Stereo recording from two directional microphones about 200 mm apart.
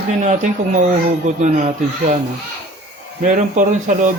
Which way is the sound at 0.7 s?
35° right (ahead or behind).